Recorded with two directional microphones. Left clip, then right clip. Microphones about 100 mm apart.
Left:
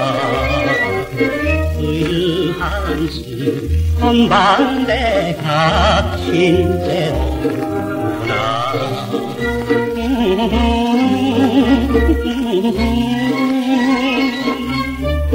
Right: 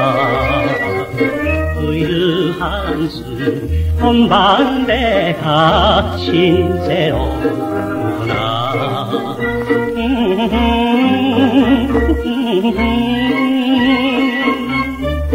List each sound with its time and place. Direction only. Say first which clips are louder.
0.0 s music: right 3 dB; 30° left (ahead or behind)
2.0 s music: right 2 dB; 25° left (ahead or behind)
4.0 s music: right 1 dB; 35° left (ahead or behind)
9.7 s music: even; 30° left (ahead or behind)